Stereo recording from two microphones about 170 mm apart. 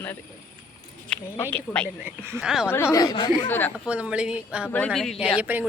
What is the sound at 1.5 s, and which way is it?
A woman's voice, 5° left (ahead or behind).